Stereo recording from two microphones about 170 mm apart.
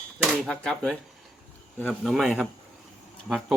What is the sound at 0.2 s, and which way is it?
Speech, 5° left (ahead or behind).